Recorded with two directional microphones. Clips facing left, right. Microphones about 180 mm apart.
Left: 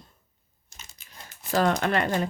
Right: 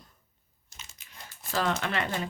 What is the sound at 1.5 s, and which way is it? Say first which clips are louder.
Speech: left 6 dB; 45° left (ahead or behind).